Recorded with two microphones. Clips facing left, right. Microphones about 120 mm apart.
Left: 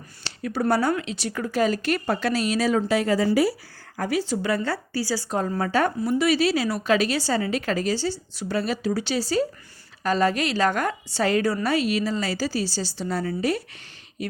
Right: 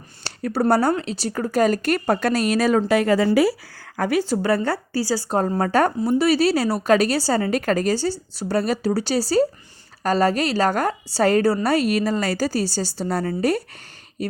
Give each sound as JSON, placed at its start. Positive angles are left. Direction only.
{"t": 0.3, "sound": "a sound", "side_deg": -45}
{"t": 0.7, "sound": "a woman's voice", "side_deg": -40}
{"t": 4.2, "sound": "a woman's voice", "side_deg": -40}
{"t": 6.0, "sound": "a woman's voice", "side_deg": -35}
{"t": 14.2, "sound": "a woman's voice", "side_deg": -35}